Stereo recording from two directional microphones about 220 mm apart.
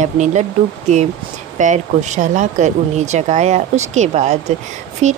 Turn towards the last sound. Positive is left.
turn(degrees=-30)  # may be behind; listen again after turning